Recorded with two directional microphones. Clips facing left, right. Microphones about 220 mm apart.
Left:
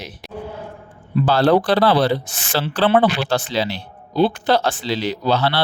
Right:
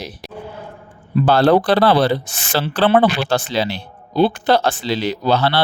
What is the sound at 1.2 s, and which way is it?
Speech, 55° right (ahead or behind).